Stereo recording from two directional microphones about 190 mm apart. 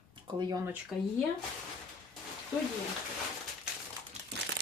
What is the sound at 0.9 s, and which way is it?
Speech, 5° right (ahead or behind).